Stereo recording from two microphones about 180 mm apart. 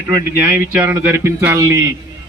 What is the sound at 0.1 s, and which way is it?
Speech, 10° right (ahead or behind).